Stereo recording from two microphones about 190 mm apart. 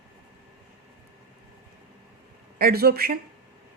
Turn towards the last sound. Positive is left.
turn(degrees=-50)  # may be behind; listen again after turning